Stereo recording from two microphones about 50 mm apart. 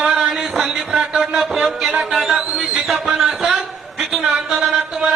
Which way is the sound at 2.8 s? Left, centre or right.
Centre.